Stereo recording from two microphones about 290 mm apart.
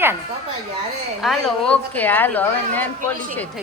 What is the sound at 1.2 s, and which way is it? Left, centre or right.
A woman's voice, centre.